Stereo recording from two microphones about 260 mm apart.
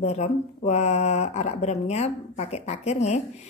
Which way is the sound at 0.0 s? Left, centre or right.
Left.